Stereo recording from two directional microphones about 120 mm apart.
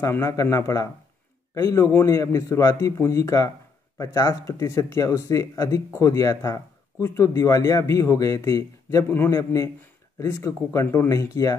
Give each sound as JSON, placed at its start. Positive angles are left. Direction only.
{"t": 0.0, "sound": "speech", "side_deg": 25}